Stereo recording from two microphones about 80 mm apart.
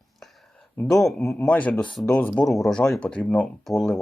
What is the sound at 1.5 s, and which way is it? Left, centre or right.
Speech, centre.